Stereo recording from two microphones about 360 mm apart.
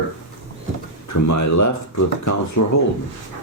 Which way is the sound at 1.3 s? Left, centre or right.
Left.